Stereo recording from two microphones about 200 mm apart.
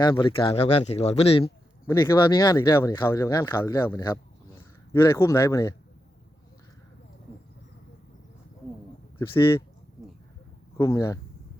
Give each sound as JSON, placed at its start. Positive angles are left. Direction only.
{"t": 0.0, "sound": "speech", "side_deg": 25}
{"t": 1.9, "sound": "speech", "side_deg": 15}
{"t": 9.1, "sound": "speech", "side_deg": 10}
{"t": 10.8, "sound": "speech", "side_deg": 15}